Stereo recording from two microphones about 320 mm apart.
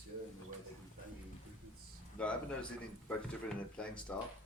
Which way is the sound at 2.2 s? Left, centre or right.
Centre.